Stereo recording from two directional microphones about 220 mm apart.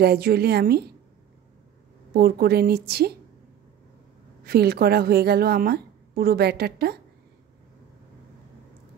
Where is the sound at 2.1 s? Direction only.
45° right (ahead or behind).